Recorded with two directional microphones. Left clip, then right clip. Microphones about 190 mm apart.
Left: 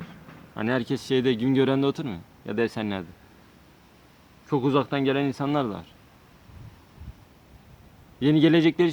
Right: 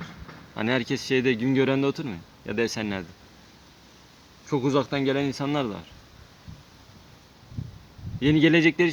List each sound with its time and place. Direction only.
0.5 s speech: centre (ahead or behind)
0.8 s speech: 15° left (ahead or behind)
4.4 s speech: 5° left (ahead or behind)
8.2 s speech: 15° left (ahead or behind)